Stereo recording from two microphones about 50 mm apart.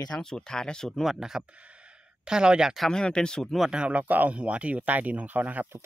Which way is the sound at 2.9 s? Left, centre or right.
Centre.